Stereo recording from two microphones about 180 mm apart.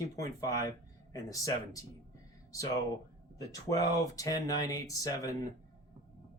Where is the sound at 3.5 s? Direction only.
20° left (ahead or behind).